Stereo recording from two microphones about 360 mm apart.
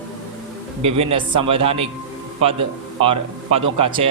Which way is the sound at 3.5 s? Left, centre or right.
Centre.